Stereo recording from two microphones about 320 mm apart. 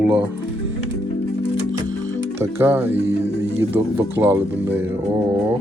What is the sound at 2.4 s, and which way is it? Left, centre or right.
Speech, centre.